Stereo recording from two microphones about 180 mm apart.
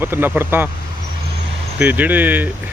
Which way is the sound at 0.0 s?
10° right (ahead or behind).